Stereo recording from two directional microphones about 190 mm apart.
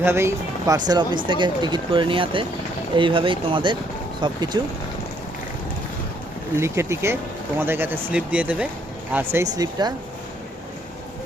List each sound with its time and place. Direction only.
0.0 s speech: 15° right (ahead or behind)
6.6 s speech: 15° right (ahead or behind)